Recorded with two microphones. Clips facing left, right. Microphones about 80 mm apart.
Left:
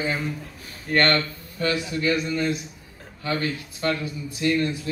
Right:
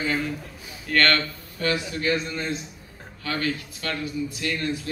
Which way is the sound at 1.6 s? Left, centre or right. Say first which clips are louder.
Left 1 dB; right.